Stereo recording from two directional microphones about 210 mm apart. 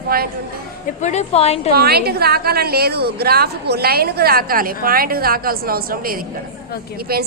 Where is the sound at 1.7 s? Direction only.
50° right (ahead or behind).